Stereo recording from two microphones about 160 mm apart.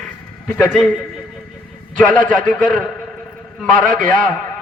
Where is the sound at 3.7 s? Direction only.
60° right (ahead or behind).